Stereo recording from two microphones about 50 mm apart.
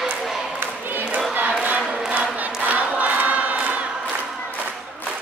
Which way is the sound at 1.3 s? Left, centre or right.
Right.